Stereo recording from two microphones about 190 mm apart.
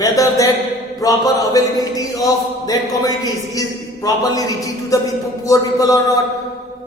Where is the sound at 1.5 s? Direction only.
20° left (ahead or behind).